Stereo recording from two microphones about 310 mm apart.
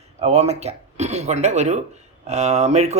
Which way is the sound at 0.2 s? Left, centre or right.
Right.